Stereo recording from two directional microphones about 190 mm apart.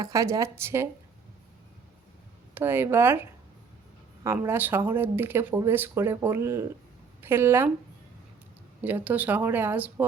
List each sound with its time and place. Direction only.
0.0 s speech: 15° right (ahead or behind)
2.6 s speech: 10° right (ahead or behind)
8.8 s speech: 10° right (ahead or behind)